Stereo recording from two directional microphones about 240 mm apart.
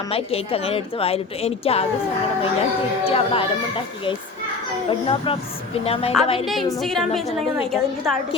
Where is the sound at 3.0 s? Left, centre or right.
Left.